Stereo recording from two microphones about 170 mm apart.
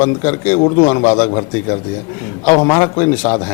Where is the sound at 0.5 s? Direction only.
35° left (ahead or behind).